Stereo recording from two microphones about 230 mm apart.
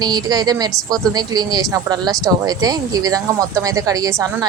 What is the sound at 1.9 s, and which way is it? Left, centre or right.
Speech, centre.